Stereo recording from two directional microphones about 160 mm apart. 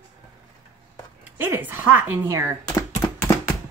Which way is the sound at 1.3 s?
10° right (ahead or behind).